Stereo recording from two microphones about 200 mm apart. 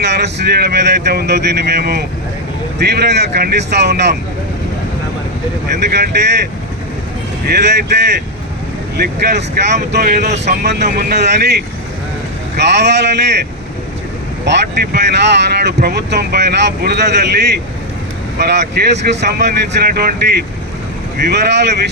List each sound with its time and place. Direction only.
0.0 s speech: 60° right (ahead or behind)
5.7 s speech: 55° right (ahead or behind)
7.4 s speech: 55° right (ahead or behind)
14.9 s speech: 55° right (ahead or behind)